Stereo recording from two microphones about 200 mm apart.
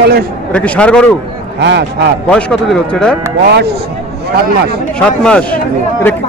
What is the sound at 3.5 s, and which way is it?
Speech, 55° right (ahead or behind).